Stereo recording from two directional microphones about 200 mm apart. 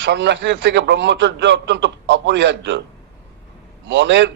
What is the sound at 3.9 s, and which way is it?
Speech, 65° right (ahead or behind).